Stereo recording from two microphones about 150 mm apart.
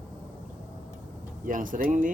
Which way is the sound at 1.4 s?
60° right (ahead or behind).